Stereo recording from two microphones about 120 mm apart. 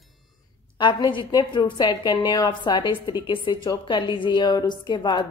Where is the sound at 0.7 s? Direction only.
40° left (ahead or behind).